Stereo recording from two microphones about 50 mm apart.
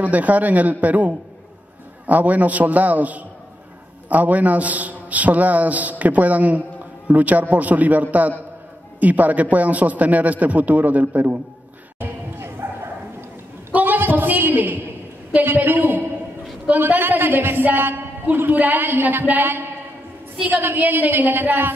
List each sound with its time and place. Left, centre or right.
0.0 s a man's voice: right
12.0 s dog: right
13.7 s a sound: right
15.3 s a man's voice: right
20.6 s a man's voice: right